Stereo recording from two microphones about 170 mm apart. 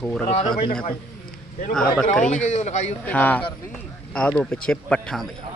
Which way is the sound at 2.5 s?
45° left (ahead or behind).